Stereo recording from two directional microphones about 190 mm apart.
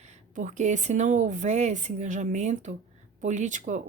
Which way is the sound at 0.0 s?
40° right (ahead or behind).